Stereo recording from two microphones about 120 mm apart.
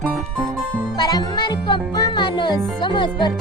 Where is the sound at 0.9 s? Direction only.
35° left (ahead or behind).